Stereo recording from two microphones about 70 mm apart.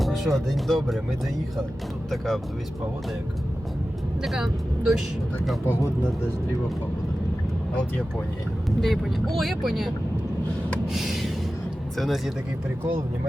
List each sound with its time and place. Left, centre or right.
0.0 s speech: centre
2.0 s speech: centre
4.2 s speech: centre
5.6 s speech: left
8.8 s speech: centre
10.8 s a sound: centre
11.9 s speech: centre